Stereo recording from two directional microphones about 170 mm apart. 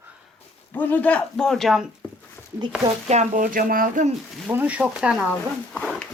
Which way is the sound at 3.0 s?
40° right (ahead or behind).